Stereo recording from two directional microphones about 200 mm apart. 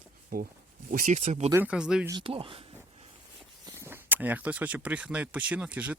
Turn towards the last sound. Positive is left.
turn(degrees=-5)  # may be behind; listen again after turning